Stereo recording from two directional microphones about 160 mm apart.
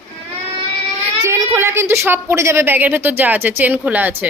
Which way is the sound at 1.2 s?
15° right (ahead or behind).